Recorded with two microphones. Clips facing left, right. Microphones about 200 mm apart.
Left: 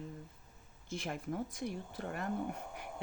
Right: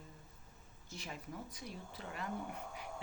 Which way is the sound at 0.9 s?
55° left (ahead or behind).